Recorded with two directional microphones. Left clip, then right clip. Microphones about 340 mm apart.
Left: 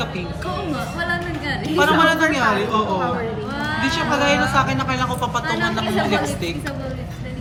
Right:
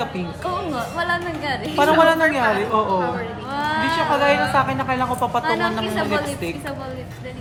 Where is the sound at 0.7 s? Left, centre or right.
Centre.